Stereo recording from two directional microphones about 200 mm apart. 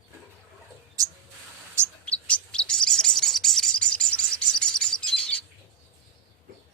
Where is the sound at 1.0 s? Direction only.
15° right (ahead or behind).